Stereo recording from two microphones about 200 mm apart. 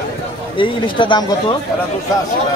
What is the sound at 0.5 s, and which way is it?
Speech, 25° left (ahead or behind).